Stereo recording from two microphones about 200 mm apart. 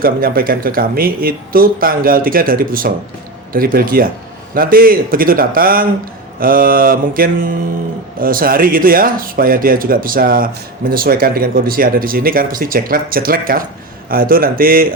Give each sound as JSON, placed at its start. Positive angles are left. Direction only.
{"t": 0.0, "sound": "speech", "side_deg": -45}